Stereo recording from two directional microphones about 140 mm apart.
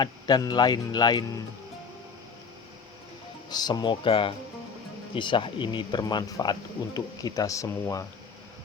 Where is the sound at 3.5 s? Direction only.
30° left (ahead or behind).